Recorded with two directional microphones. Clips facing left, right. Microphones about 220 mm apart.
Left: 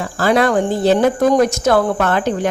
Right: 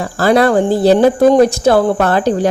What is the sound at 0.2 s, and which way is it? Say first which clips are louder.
Speech: right 4 dB; 35° right (ahead or behind).